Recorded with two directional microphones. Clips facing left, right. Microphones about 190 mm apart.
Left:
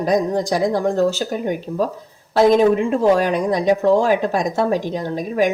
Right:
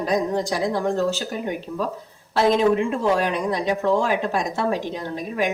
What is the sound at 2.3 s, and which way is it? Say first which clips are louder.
Speech: left 5 dB; 45° left (ahead or behind).